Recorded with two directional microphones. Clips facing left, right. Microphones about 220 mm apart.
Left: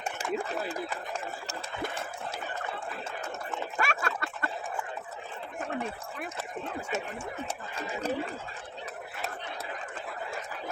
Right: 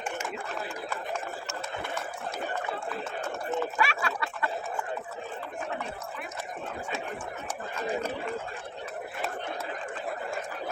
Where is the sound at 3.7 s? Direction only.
45° left (ahead or behind).